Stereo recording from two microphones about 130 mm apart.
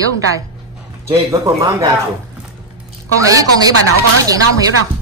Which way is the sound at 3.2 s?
25° right (ahead or behind).